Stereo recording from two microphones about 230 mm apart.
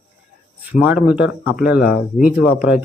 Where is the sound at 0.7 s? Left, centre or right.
Centre.